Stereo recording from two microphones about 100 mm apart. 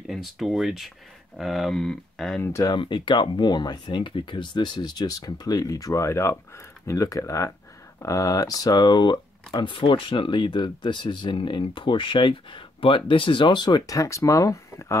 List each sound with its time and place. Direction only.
0.0 s speech: centre (ahead or behind)
2.4 s speech: 30° left (ahead or behind)
2.7 s speech: 55° left (ahead or behind); by 15.0 s 30° left (ahead or behind)